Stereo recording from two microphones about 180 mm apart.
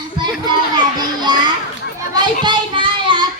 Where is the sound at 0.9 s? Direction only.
25° right (ahead or behind).